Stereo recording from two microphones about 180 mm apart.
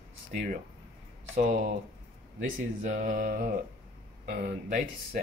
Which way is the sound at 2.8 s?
45° right (ahead or behind).